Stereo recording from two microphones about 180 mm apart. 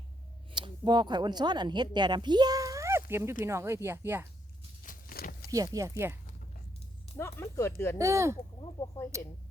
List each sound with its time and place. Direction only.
0.5 s speech: 25° right (ahead or behind)
4.8 s a sound: 50° left (ahead or behind)
5.5 s speech: 20° right (ahead or behind)
7.2 s speech: 15° left (ahead or behind)
7.9 s speech: 15° right (ahead or behind)
8.8 s speech: 15° left (ahead or behind)
9.1 s speech: 15° right (ahead or behind)